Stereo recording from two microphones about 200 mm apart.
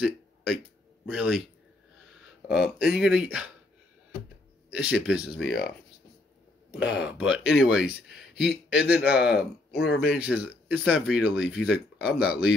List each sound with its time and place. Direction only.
0.0 s a sound: 5° right (ahead or behind)
1.0 s speech: centre (ahead or behind)
2.1 s a sound: 5° right (ahead or behind)
2.8 s speech: 5° right (ahead or behind)
4.6 s speech: 5° right (ahead or behind)
5.4 s speech: 55° left (ahead or behind)
6.7 s speech: 5° right (ahead or behind)